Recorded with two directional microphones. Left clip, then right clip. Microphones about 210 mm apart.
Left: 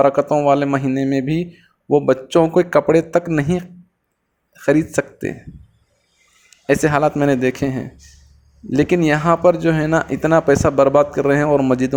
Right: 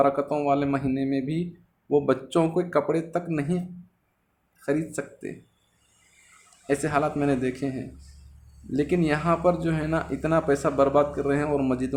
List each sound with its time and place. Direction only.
0.0 s a man's voice: 30° left (ahead or behind)
4.6 s a man's voice: 35° left (ahead or behind)
6.5 s a sound: 35° left (ahead or behind)
6.8 s a man's voice: 35° left (ahead or behind)